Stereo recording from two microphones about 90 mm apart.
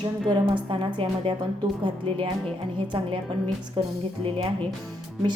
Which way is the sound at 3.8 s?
65° right (ahead or behind).